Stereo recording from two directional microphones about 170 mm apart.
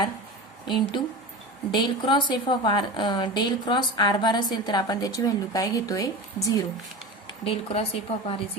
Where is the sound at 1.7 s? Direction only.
25° left (ahead or behind).